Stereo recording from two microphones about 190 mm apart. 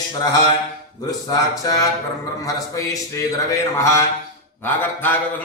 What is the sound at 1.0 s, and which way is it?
Speech, 20° left (ahead or behind).